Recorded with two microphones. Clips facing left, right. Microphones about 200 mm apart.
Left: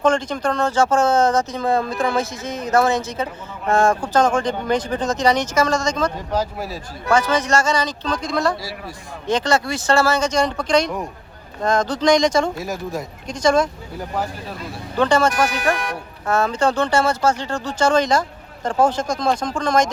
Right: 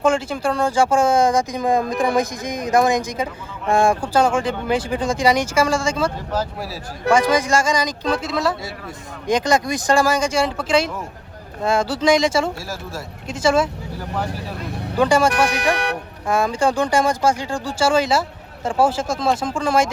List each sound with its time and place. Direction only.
0.0 s speech: 10° right (ahead or behind)
7.1 s speech: 10° right (ahead or behind)
12.5 s speech: 20° left (ahead or behind)
13.2 s speech: 5° right (ahead or behind)
14.9 s speech: 10° right (ahead or behind)
15.7 s speech: 70° right (ahead or behind)
16.2 s speech: 10° right (ahead or behind)